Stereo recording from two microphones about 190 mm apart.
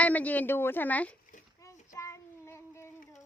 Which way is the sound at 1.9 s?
15° left (ahead or behind).